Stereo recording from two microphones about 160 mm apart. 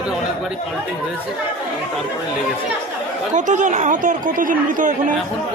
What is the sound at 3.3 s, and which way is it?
Speech, 50° right (ahead or behind).